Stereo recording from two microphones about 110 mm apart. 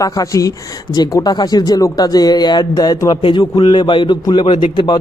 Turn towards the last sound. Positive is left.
turn(degrees=45)  # may be behind; listen again after turning